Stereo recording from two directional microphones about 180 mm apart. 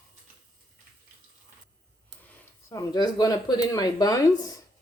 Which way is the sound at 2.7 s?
20° left (ahead or behind).